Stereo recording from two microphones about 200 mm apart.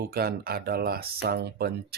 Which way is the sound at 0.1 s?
50° right (ahead or behind).